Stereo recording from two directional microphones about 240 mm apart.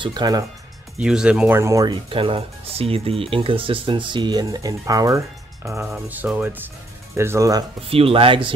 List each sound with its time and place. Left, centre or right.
0.0 s speech: centre
0.9 s speech: centre; by 8.5 s right